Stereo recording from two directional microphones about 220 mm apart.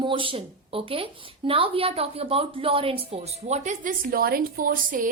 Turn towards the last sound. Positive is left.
turn(degrees=-40)  # may be behind; listen again after turning